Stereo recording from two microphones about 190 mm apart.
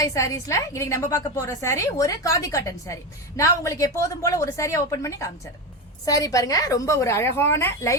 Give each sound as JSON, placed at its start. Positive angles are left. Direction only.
{"t": 0.0, "sound": "a woman's voice", "side_deg": 15}